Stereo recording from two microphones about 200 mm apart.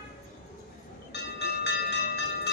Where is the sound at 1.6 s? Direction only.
60° left (ahead or behind).